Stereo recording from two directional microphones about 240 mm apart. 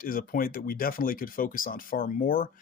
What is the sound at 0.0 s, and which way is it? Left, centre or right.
Speech, left.